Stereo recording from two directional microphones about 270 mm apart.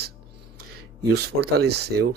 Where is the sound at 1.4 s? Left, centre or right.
Right.